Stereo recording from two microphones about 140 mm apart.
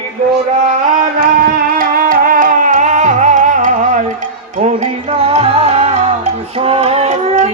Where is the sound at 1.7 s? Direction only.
90° right; by 4.1 s 60° right (ahead or behind).